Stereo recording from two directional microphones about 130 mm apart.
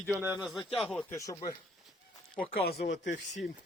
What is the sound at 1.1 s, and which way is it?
Speech, 25° left (ahead or behind).